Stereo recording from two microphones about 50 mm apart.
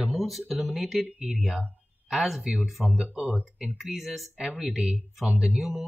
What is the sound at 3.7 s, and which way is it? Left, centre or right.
Speech, centre.